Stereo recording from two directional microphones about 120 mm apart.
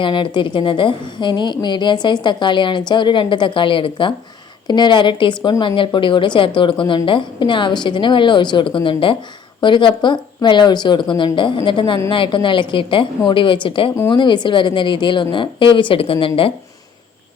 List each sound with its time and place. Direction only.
0.0 s a woman's voice: 40° left (ahead or behind)